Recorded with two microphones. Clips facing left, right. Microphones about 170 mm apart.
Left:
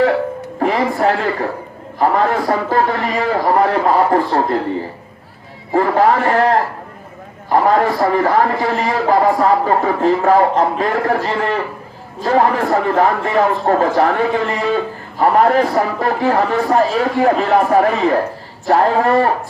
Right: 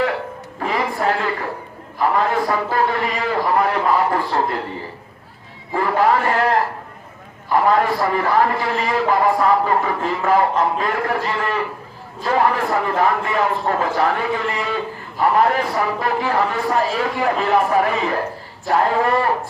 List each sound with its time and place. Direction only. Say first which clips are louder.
0.6 s a sound: left 5 dB; 40° left (ahead or behind)
2.0 s a man's voice: left 3 dB; 45° left (ahead or behind)
5.7 s a man's voice: left 4 dB; 40° left (ahead or behind)
15.2 s a man's voice: left 4 dB; 45° left (ahead or behind)